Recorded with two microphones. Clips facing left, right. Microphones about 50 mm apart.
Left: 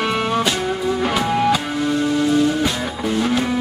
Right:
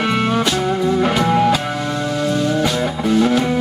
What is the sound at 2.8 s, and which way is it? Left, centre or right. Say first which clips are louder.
Music: right 5 dB; centre.